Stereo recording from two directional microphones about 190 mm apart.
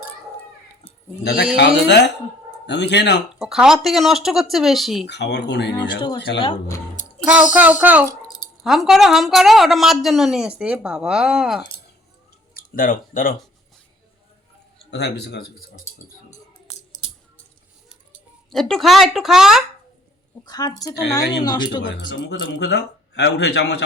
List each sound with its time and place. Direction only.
1.5 s speech: 65° left (ahead or behind)
3.3 s speech: 5° right (ahead or behind)
5.0 s speech: 65° left (ahead or behind)
7.5 s speech: 10° right (ahead or behind)
12.5 s speech: 50° left (ahead or behind)
14.8 s speech: 60° left (ahead or behind)
18.5 s speech: 5° left (ahead or behind)
20.4 s a woman's voice: 20° left (ahead or behind)
21.9 s speech: 65° left (ahead or behind)